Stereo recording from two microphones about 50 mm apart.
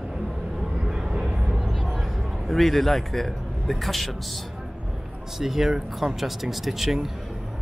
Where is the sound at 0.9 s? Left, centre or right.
Centre.